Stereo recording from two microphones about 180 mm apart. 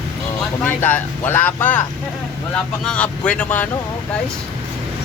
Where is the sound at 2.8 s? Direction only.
5° left (ahead or behind).